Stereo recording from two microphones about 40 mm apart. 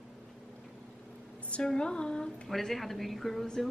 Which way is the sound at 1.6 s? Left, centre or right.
Left.